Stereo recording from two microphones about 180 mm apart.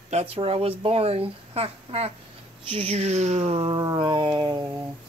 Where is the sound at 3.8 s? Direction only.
20° right (ahead or behind).